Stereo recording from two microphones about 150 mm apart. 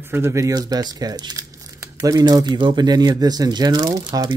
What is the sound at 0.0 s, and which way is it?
Speech, 15° right (ahead or behind).